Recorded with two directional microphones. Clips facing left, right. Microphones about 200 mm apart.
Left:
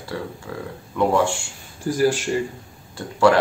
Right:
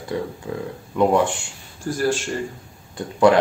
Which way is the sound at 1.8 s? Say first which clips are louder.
Left 3 dB; 10° left (ahead or behind).